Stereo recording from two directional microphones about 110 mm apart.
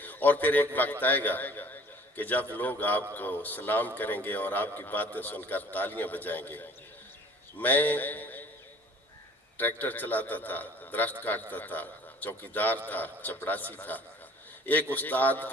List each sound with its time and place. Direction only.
0.0 s a man's voice: 15° left (ahead or behind)
9.6 s a man's voice: 15° left (ahead or behind)